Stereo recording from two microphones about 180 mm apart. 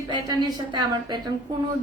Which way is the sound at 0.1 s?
25° right (ahead or behind).